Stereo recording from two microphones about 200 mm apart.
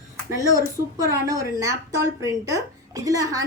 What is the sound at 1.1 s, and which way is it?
Speech, 15° right (ahead or behind).